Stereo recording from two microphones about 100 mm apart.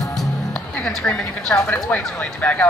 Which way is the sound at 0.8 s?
5° left (ahead or behind).